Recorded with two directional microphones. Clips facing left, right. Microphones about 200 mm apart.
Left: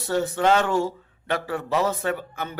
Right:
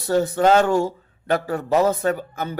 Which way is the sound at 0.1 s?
40° right (ahead or behind).